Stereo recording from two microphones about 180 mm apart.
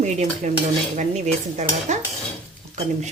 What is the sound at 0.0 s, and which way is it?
Speech, 40° right (ahead or behind).